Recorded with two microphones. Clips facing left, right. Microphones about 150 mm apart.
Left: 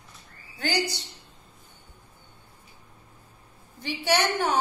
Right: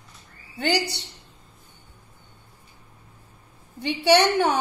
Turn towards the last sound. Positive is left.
turn(degrees=-65)  # may be behind; listen again after turning